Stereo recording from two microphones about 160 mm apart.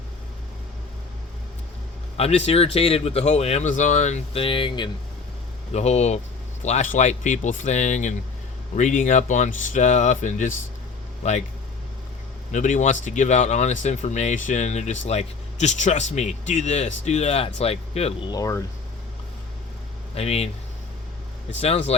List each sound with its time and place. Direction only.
2.1 s speech: 40° left (ahead or behind)
5.7 s speech: 45° left (ahead or behind)
12.5 s speech: 50° left (ahead or behind)
18.3 s speech: 20° left (ahead or behind)
20.1 s speech: 40° left (ahead or behind)
21.6 s speech: 40° left (ahead or behind)